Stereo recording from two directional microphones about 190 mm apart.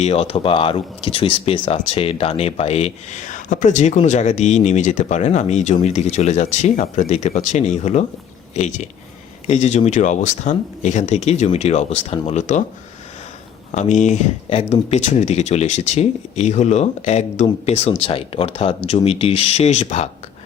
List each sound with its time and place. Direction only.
0.0 s speech: 35° left (ahead or behind)
13.7 s speech: 40° left (ahead or behind)